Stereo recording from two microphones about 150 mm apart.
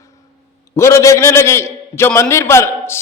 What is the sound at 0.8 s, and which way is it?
A man's voice, 20° left (ahead or behind).